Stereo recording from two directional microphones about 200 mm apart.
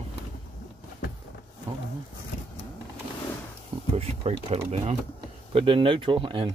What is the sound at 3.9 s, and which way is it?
Speech, 30° right (ahead or behind).